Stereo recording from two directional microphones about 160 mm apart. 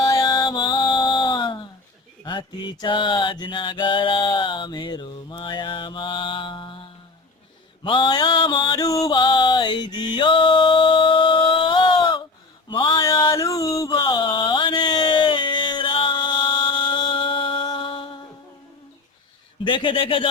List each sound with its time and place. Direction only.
0.0 s music: 25° left (ahead or behind)
2.2 s mantra: 30° left (ahead or behind)
7.9 s music: 30° left (ahead or behind)
12.6 s a sound: 30° left (ahead or behind)
19.6 s speech: 30° left (ahead or behind)